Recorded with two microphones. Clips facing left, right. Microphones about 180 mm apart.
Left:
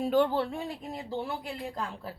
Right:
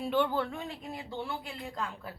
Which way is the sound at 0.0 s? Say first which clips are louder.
Left 4 dB; 40° left (ahead or behind).